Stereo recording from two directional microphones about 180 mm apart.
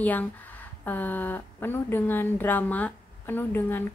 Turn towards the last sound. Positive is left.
turn(degrees=10)  # may be behind; listen again after turning